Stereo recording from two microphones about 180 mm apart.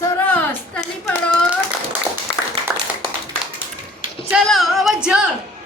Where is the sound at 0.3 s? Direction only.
10° left (ahead or behind).